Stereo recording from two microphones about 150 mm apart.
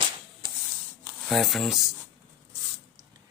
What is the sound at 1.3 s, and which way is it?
Speech, centre (ahead or behind).